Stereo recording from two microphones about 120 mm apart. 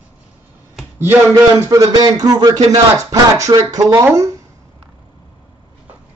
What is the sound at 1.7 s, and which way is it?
Speech, 30° right (ahead or behind).